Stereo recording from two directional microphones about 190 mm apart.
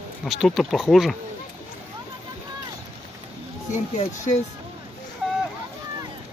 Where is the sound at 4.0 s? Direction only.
35° left (ahead or behind).